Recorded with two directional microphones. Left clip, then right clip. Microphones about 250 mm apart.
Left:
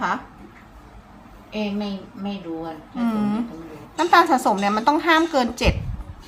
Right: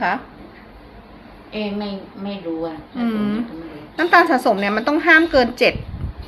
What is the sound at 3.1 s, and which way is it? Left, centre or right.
A woman's voice, centre.